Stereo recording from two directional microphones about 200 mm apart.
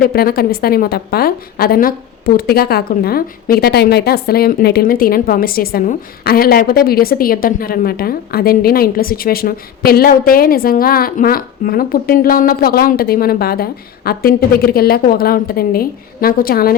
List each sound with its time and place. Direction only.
0.0 s a woman's voice: 50° left (ahead or behind)